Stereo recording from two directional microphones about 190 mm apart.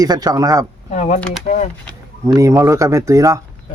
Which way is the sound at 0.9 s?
40° left (ahead or behind).